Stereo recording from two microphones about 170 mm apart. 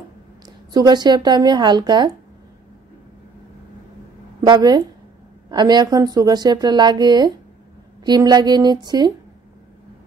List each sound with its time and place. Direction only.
0.7 s a woman's voice: 25° right (ahead or behind)
4.5 s a woman's voice: 25° right (ahead or behind)